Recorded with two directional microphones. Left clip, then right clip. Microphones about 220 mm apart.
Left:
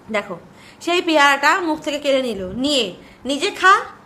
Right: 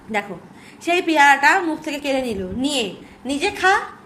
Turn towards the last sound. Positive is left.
turn(degrees=15)  # may be behind; listen again after turning